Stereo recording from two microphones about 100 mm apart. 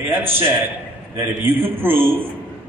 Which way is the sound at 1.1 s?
20° right (ahead or behind).